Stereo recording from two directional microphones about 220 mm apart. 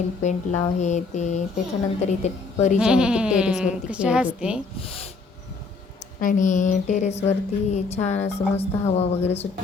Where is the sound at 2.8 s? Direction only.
5° right (ahead or behind).